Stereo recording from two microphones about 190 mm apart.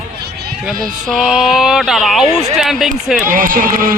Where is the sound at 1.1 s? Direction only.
Centre (ahead or behind).